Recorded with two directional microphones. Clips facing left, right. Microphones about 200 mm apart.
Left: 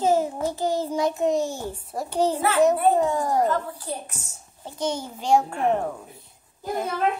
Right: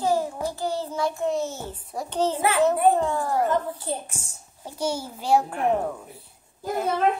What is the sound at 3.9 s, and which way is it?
Speech, 25° right (ahead or behind).